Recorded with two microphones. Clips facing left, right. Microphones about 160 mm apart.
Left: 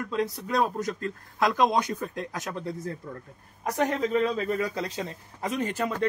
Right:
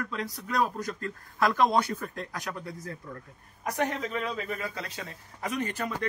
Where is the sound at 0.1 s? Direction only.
25° left (ahead or behind).